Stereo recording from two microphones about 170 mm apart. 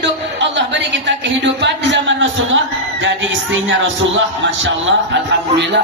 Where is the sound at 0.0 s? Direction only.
90° right.